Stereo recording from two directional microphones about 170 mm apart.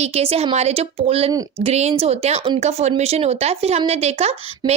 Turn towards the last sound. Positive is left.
turn(degrees=-40)  # may be behind; listen again after turning